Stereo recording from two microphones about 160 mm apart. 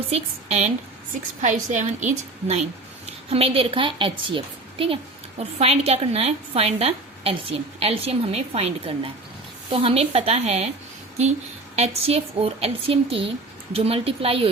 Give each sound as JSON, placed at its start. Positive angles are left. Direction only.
{"t": 0.1, "sound": "a woman's voice", "side_deg": -40}
{"t": 11.8, "sound": "a woman's voice", "side_deg": -40}